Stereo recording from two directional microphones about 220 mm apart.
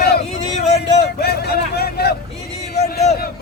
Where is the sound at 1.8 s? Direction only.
45° left (ahead or behind).